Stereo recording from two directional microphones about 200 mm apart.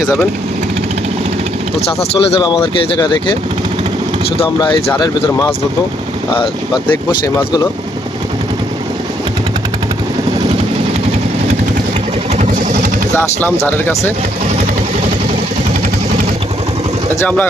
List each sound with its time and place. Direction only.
2.0 s speech: 30° left (ahead or behind)
4.4 s speech: 25° left (ahead or behind)
13.1 s speech: 10° left (ahead or behind)
17.2 s speech: 10° left (ahead or behind)